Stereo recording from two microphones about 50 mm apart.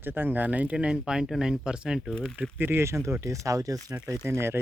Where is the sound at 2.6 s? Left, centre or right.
Right.